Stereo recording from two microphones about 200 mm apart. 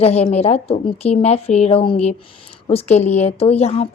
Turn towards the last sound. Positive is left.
turn(degrees=30)  # may be behind; listen again after turning